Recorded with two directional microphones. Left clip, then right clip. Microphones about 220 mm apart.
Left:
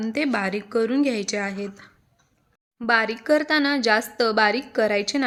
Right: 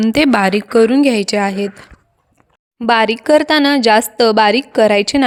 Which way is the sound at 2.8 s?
35° right (ahead or behind).